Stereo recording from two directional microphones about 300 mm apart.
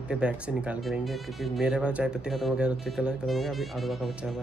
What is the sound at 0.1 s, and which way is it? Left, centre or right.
Speech, centre.